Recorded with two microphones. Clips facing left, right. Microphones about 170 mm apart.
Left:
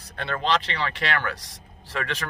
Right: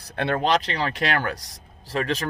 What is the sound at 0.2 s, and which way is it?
Speech, 50° right (ahead or behind).